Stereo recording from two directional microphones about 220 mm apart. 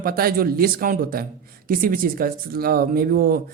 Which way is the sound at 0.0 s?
40° right (ahead or behind).